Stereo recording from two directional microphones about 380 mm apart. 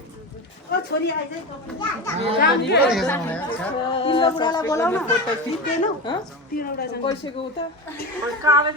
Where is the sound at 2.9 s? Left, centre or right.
Centre.